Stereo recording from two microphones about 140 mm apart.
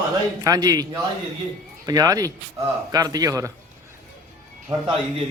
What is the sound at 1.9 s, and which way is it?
A man's voice, 25° right (ahead or behind).